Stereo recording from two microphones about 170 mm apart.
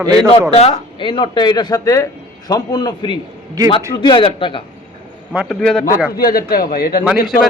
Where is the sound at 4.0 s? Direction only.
30° left (ahead or behind).